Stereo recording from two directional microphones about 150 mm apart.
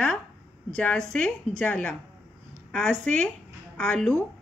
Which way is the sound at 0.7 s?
5° left (ahead or behind).